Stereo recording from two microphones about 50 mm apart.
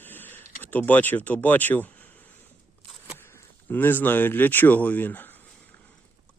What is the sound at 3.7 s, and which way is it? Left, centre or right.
Speech, left.